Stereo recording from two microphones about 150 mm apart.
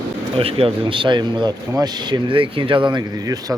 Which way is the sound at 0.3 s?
40° right (ahead or behind).